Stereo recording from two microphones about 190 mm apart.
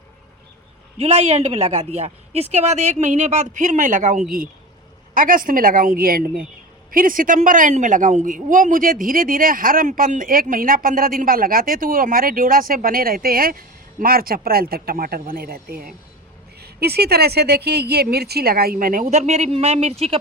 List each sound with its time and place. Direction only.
0.9 s a woman's voice: 35° right (ahead or behind)